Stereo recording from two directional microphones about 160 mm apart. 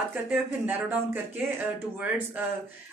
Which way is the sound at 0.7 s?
10° right (ahead or behind).